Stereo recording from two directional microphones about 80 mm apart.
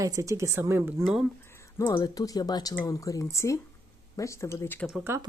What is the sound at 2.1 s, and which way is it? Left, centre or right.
Speech, left.